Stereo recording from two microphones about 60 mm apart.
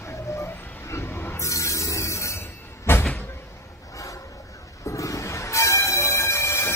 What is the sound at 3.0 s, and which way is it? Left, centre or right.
Vehicle, left.